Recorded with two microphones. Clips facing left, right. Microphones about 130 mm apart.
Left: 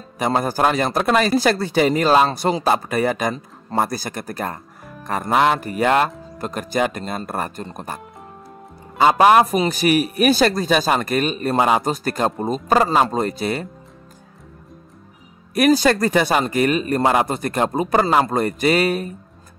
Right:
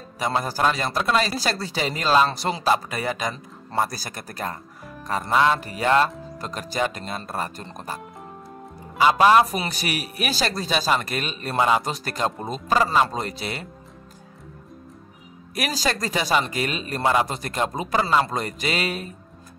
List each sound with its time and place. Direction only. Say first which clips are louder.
0.2 s a man's voice: left 4 dB; 55° left (ahead or behind)
9.0 s a man's voice: left 3 dB; 50° left (ahead or behind)
15.5 s a man's voice: left 11 dB; 55° left (ahead or behind)